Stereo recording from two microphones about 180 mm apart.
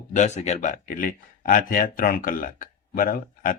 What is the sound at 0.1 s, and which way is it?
Speech, 40° left (ahead or behind).